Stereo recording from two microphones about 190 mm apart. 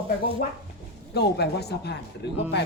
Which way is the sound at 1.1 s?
60° left (ahead or behind).